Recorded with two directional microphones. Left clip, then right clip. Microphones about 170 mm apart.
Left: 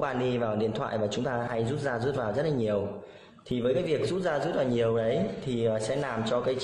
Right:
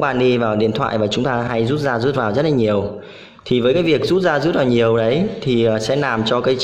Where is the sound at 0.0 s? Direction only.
40° right (ahead or behind).